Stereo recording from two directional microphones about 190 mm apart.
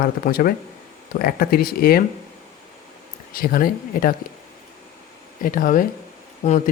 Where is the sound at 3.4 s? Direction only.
50° left (ahead or behind).